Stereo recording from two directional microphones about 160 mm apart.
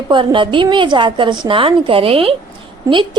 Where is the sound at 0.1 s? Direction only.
30° right (ahead or behind).